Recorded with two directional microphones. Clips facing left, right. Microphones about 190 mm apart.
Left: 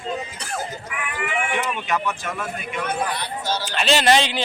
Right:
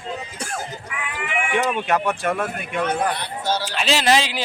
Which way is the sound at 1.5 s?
55° right (ahead or behind).